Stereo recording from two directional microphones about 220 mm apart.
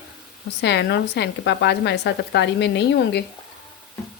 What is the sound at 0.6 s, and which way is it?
A woman's voice, 50° left (ahead or behind).